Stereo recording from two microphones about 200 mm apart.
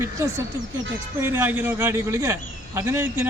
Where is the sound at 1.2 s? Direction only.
10° right (ahead or behind).